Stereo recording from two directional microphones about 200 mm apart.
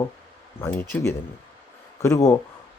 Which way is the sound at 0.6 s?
15° left (ahead or behind).